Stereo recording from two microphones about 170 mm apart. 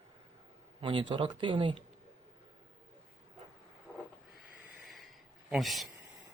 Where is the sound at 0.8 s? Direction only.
30° right (ahead or behind).